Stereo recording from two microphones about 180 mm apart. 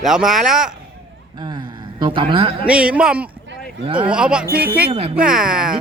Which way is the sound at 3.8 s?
25° right (ahead or behind).